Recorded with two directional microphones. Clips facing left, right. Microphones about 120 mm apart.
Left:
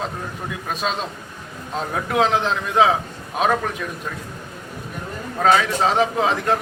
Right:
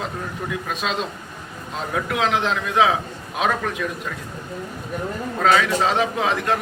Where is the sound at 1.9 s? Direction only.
35° left (ahead or behind).